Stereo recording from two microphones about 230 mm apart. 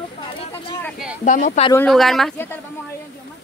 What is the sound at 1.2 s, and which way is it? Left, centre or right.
Speech, left.